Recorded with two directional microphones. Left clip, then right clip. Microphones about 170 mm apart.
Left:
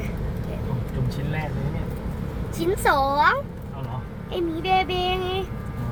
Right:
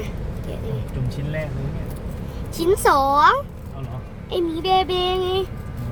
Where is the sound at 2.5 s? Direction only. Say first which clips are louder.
Right 4 dB; 25° right (ahead or behind).